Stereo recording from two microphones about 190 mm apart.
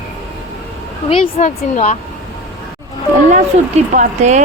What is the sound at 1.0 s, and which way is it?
Speech, 30° left (ahead or behind).